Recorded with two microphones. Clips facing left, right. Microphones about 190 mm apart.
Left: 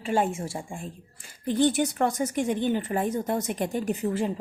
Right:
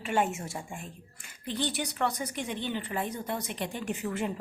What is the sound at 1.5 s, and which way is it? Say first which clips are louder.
A woman's voice: left 10 dB; 50° left (ahead or behind).